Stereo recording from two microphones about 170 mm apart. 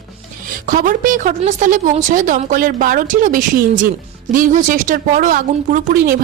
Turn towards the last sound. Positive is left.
turn(degrees=-55)  # may be behind; listen again after turning